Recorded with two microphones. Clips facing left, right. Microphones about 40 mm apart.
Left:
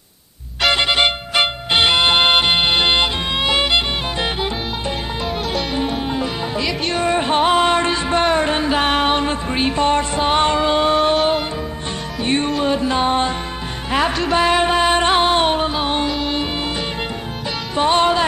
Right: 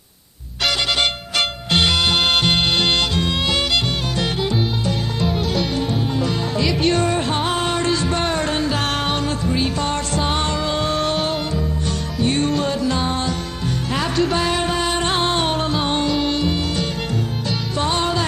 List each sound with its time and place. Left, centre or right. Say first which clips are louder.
0.7 s music: left 4 dB; left
5.2 s music: right 2 dB; centre
5.8 s music: left 1 dB; centre
6.6 s music: right 5 dB; centre
7.0 s music: left 3 dB; left
12.2 s music: even; left
12.4 s music: left 1 dB; centre
12.7 s music: left 4 dB; left
14.3 s music: left 5 dB; left
16.3 s music: right 1 dB; left